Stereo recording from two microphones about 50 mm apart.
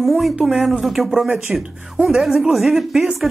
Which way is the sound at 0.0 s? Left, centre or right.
Centre.